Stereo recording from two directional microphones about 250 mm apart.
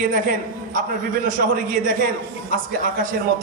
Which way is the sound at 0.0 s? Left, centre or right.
Right.